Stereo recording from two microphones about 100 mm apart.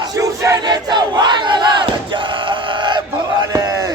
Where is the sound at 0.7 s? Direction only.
45° right (ahead or behind).